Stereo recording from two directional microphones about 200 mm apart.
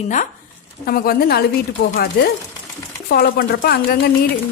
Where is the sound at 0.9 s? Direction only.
50° left (ahead or behind).